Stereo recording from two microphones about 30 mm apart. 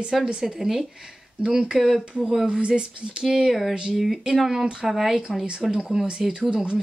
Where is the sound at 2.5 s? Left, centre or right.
Right.